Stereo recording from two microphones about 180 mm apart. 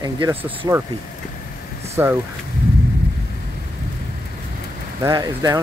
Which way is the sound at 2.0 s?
15° right (ahead or behind).